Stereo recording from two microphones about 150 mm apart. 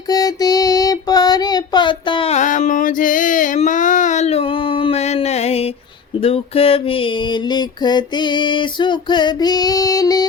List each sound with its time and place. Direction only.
0.1 s child singing: 25° left (ahead or behind)
2.3 s a sound: 55° left (ahead or behind)
6.1 s music: 40° left (ahead or behind); by 10.2 s 25° left (ahead or behind)